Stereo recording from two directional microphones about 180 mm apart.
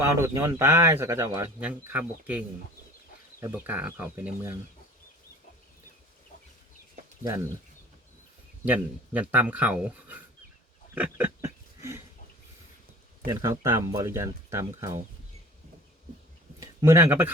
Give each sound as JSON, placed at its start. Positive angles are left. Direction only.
{"t": 0.0, "sound": "speech", "side_deg": -15}
{"t": 3.4, "sound": "speech", "side_deg": -10}
{"t": 8.6, "sound": "speech", "side_deg": -10}
{"t": 10.9, "sound": "a sound", "side_deg": -10}
{"t": 13.2, "sound": "speech", "side_deg": -15}
{"t": 16.6, "sound": "speech", "side_deg": -15}